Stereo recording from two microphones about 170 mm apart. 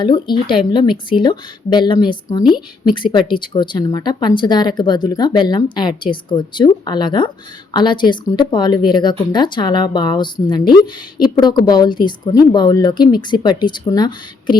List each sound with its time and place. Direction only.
0.0 s speech: 25° left (ahead or behind)